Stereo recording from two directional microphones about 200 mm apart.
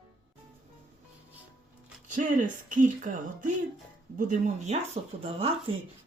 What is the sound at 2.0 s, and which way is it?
A woman's voice, 40° right (ahead or behind).